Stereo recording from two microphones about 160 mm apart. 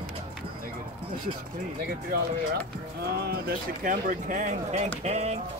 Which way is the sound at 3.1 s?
75° right (ahead or behind).